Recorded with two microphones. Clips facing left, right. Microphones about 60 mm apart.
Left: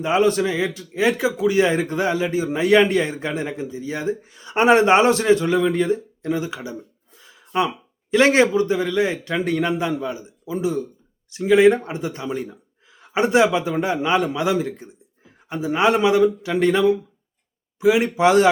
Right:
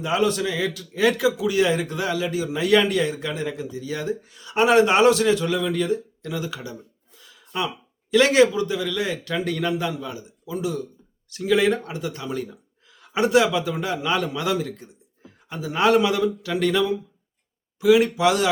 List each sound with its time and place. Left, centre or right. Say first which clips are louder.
0.0 s speech: left 4 dB; left
7.2 s a sound: left 6 dB; left
8.1 s speech: left 1 dB; left